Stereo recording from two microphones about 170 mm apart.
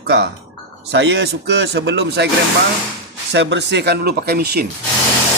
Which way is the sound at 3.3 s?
90° right.